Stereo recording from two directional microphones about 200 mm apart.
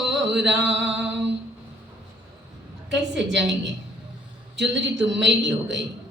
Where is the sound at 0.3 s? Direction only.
60° right (ahead or behind).